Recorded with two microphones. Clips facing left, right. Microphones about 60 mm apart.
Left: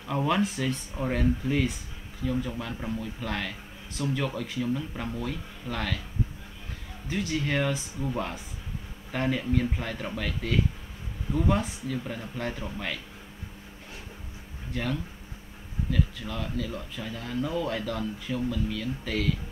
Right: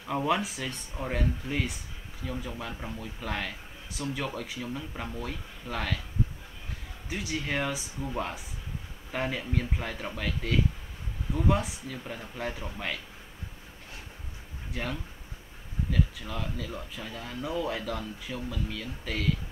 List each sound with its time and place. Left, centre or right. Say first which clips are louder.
0.0 s a man's voice: left 2 dB; centre
7.1 s a man's voice: left 4 dB; centre
14.7 s a man's voice: left 4 dB; centre